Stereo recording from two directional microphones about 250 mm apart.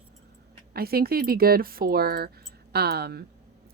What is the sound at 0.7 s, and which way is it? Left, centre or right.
A woman's voice, right.